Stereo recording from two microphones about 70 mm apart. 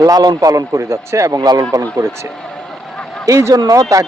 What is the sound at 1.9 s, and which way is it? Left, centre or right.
Speech, right.